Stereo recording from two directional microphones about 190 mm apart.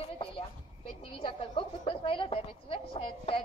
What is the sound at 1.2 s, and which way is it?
A woman's voice, 25° left (ahead or behind).